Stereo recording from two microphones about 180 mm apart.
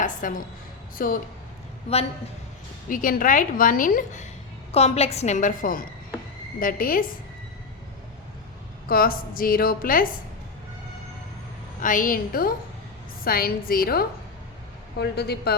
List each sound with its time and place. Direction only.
0.0 s a sound: 45° left (ahead or behind)
0.9 s speech: 50° left (ahead or behind)
2.9 s a woman's voice: 50° left (ahead or behind)
8.9 s a woman's voice: 55° left (ahead or behind)
11.8 s a woman's voice: 50° left (ahead or behind); by 15.5 s 65° left (ahead or behind)